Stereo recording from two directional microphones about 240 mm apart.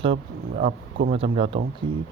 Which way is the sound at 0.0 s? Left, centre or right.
Right.